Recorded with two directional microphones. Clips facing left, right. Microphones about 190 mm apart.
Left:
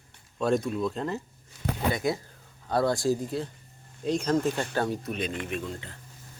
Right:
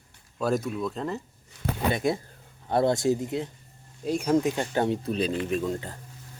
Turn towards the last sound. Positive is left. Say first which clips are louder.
# right 6 dB
turn(degrees=-40)  # may be behind; listen again after turning